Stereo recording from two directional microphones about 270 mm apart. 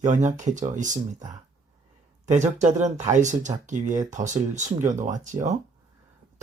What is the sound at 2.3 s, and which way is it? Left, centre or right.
Speech, right.